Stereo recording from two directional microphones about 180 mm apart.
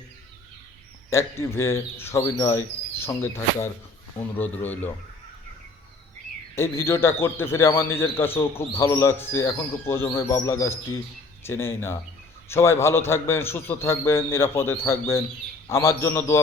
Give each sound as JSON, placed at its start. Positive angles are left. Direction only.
{"t": 1.1, "sound": "a man's voice", "side_deg": 15}
{"t": 6.6, "sound": "a man's voice", "side_deg": 15}